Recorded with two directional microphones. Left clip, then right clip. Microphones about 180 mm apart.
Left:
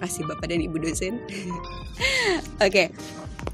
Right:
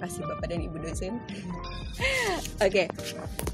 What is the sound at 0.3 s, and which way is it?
A woman's voice, 55° left (ahead or behind).